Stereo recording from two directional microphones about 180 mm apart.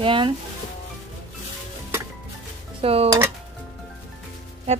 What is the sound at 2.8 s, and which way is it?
Speech, 35° right (ahead or behind).